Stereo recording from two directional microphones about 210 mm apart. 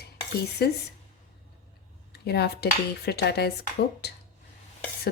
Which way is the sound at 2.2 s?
50° left (ahead or behind).